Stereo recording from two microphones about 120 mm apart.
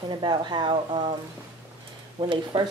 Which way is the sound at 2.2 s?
45° right (ahead or behind).